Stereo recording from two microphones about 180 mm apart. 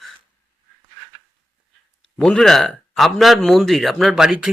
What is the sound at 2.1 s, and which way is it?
Speech, centre (ahead or behind).